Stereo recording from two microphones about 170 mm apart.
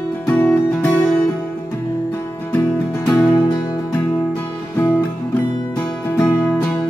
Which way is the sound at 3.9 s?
10° left (ahead or behind).